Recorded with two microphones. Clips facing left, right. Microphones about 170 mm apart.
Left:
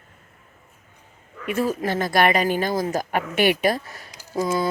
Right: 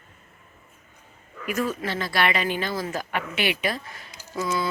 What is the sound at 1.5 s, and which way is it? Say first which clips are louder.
Speech: left 3 dB; 30° left (ahead or behind).